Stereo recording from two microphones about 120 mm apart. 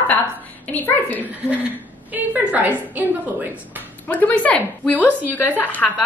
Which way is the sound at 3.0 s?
15° right (ahead or behind).